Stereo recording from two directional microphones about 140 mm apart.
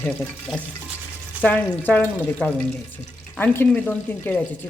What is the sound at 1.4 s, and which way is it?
Speech, 10° left (ahead or behind).